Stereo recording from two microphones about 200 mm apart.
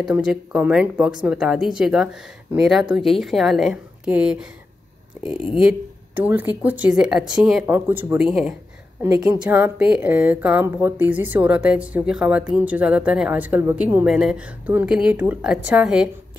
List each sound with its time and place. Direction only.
0.0 s speech: 5° right (ahead or behind)
5.2 s speech: 25° left (ahead or behind)
5.6 s a woman's voice: 5° right (ahead or behind)
9.0 s a woman's voice: 15° right (ahead or behind)